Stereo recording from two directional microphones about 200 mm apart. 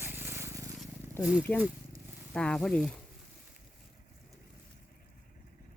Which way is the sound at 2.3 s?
5° left (ahead or behind).